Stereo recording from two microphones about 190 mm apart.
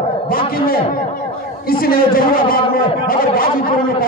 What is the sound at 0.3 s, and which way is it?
A man's voice, 50° left (ahead or behind).